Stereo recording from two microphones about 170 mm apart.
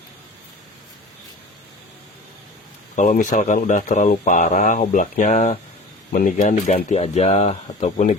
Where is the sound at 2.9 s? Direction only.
50° left (ahead or behind).